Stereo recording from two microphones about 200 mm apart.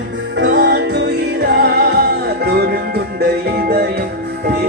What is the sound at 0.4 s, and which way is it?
Music, 50° right (ahead or behind).